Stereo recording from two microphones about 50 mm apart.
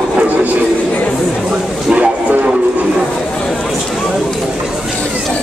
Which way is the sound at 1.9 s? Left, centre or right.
Right.